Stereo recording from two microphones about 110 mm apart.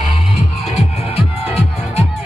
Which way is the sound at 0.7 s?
65° left (ahead or behind).